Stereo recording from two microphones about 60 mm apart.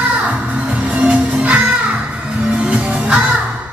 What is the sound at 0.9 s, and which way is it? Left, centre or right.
Music, right.